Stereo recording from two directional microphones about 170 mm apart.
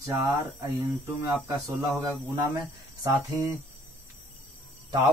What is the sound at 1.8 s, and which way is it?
Speech, 20° right (ahead or behind).